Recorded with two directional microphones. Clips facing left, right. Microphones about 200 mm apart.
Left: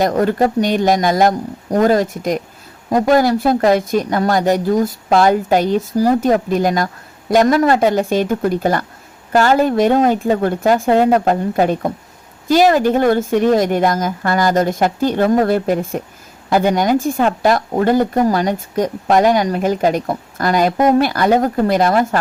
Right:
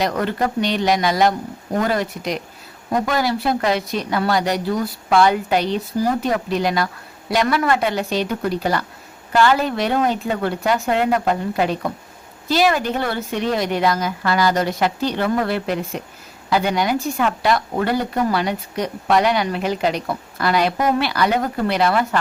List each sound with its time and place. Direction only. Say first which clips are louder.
0.0 s speech: left 6 dB; 45° left (ahead or behind)